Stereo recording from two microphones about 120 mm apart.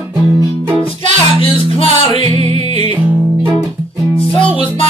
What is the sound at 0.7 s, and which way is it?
Music, 45° left (ahead or behind).